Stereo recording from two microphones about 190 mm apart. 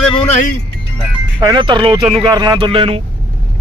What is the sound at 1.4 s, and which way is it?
Speech, 25° right (ahead or behind).